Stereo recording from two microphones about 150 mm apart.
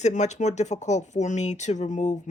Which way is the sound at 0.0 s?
50° left (ahead or behind).